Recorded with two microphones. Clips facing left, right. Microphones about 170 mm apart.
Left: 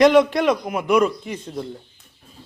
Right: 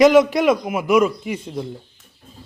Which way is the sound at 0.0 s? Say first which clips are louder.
Right 2 dB; 5° right (ahead or behind).